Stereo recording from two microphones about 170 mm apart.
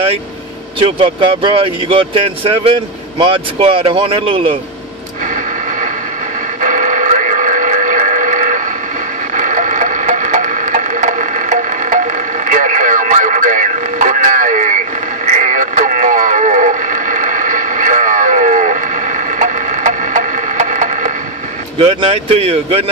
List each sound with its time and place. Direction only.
0.8 s speech: 30° right (ahead or behind)
5.2 s a sound: 50° right (ahead or behind)
6.6 s radio: 50° right (ahead or behind)
9.3 s a sound: 50° right (ahead or behind)
15.2 s radio: 45° right (ahead or behind)
21.7 s speech: 30° right (ahead or behind)